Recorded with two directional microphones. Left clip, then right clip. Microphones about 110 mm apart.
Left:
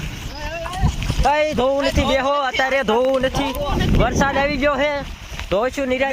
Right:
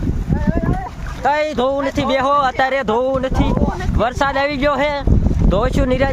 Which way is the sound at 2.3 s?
65° right (ahead or behind).